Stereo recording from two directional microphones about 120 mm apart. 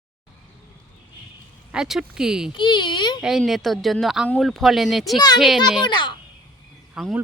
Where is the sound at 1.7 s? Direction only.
5° right (ahead or behind).